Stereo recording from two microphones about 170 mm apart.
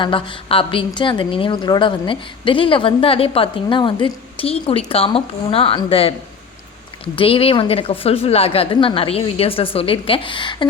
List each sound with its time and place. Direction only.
0.0 s a woman's voice: 30° left (ahead or behind)
7.2 s a woman's voice: 35° left (ahead or behind)